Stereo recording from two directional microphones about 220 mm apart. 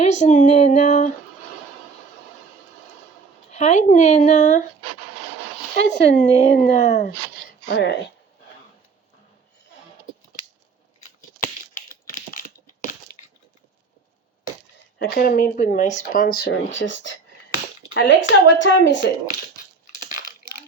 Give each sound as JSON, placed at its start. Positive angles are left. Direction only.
{"t": 0.0, "sound": "speech", "side_deg": 30}
{"t": 3.5, "sound": "speech", "side_deg": 30}
{"t": 5.8, "sound": "speech", "side_deg": 30}
{"t": 7.7, "sound": "speech", "side_deg": 50}
{"t": 11.9, "sound": "typing", "side_deg": 40}
{"t": 14.9, "sound": "a woman's voice", "side_deg": 45}